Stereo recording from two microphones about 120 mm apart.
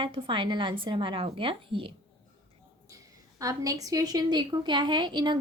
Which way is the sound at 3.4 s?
30° right (ahead or behind).